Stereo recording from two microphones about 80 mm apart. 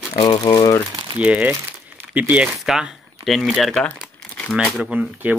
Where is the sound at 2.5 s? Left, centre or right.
Centre.